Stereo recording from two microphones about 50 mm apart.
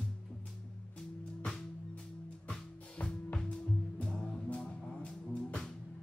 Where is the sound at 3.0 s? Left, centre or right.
Left.